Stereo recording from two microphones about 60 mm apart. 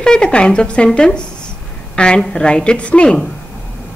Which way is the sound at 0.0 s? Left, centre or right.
Centre.